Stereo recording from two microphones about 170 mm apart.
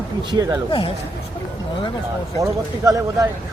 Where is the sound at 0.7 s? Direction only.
30° left (ahead or behind).